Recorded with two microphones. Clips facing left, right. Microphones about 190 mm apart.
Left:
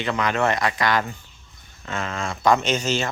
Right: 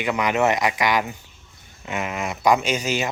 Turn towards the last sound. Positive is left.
turn(degrees=-10)  # may be behind; listen again after turning